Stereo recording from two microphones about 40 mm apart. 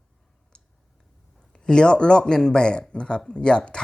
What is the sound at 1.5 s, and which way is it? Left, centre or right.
Speech, centre.